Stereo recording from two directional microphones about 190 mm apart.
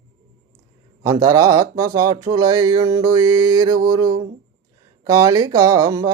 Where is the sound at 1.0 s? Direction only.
20° right (ahead or behind).